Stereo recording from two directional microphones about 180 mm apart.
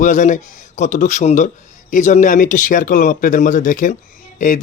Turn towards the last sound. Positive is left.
turn(degrees=45)  # may be behind; listen again after turning